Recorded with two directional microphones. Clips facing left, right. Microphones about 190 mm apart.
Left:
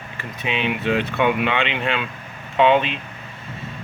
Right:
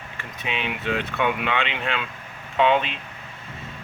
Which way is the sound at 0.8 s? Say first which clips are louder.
Left 4 dB; 10° left (ahead or behind).